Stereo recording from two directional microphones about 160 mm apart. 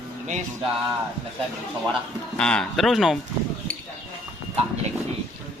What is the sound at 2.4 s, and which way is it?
Speech, 5° left (ahead or behind).